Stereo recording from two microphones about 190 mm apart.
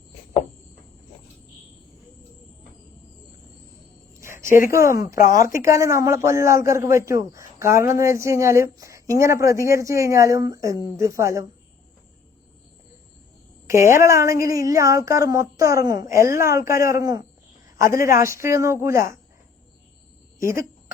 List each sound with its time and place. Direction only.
4.1 s a sound: 15° right (ahead or behind)
4.4 s speech: 45° left (ahead or behind)
4.7 s speech: 15° right (ahead or behind)
5.1 s speech: 45° left (ahead or behind)
5.7 s speech: 15° right (ahead or behind)
13.7 s speech: 15° right (ahead or behind)
20.4 s a sound: 15° right (ahead or behind)